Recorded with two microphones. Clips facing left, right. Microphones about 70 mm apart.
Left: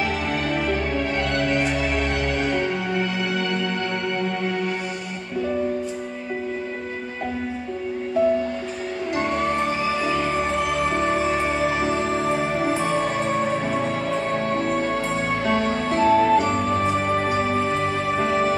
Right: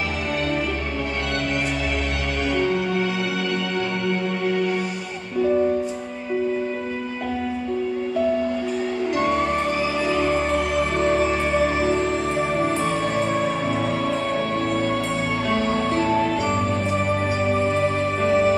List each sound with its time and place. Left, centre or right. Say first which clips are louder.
2.4 s music: right 5 dB; left
15.4 s music: right 1 dB; left